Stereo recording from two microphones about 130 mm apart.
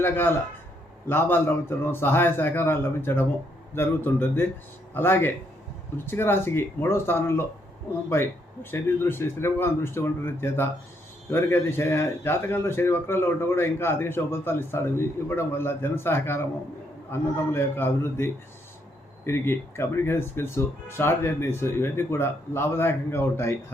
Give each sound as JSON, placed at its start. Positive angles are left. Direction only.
{"t": 0.0, "sound": "a man's voice", "side_deg": 15}
{"t": 8.7, "sound": "a man's voice", "side_deg": 20}